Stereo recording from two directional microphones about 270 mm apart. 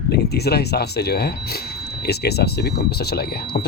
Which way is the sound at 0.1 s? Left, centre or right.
Left.